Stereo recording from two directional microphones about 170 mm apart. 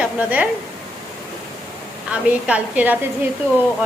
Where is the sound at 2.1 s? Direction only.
10° right (ahead or behind).